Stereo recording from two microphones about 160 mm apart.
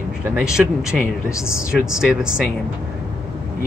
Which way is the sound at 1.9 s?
5° right (ahead or behind).